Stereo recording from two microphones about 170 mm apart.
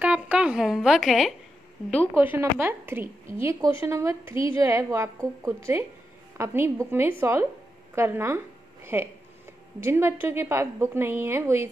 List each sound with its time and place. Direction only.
0.0 s speech: 5° right (ahead or behind)
2.1 s a woman's voice: 10° right (ahead or behind)